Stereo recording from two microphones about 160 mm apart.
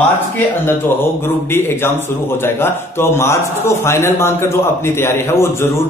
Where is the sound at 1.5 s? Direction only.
15° left (ahead or behind).